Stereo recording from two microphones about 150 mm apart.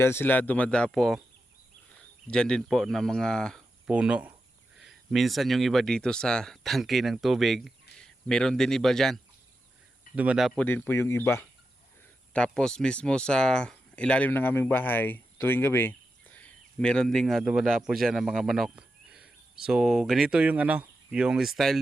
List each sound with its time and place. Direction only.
0.0 s speech: 15° left (ahead or behind)
2.2 s speech: 5° left (ahead or behind)
3.8 s speech: 10° right (ahead or behind)
10.7 s speech: 15° left (ahead or behind)
12.3 s speech: 5° left (ahead or behind)